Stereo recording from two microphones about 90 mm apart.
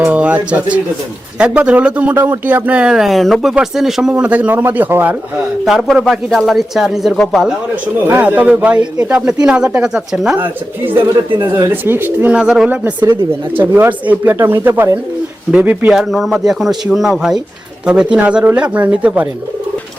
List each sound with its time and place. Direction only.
0.1 s speech: 15° right (ahead or behind)
5.6 s speech: centre (ahead or behind)
7.9 s speech: 20° right (ahead or behind); by 10.3 s 5° right (ahead or behind)
10.3 s speech: 20° right (ahead or behind); by 12.6 s 5° right (ahead or behind)
12.6 s speech: 20° right (ahead or behind)
15.9 s speech: 5° right (ahead or behind)